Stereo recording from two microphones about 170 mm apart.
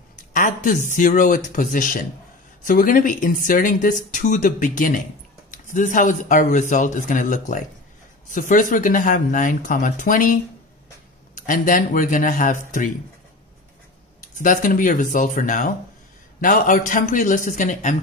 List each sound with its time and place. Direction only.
0.1 s speech: 50° left (ahead or behind)
14.2 s speech: 50° left (ahead or behind)